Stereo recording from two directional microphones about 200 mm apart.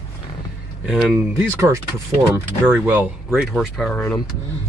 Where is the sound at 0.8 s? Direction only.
5° right (ahead or behind).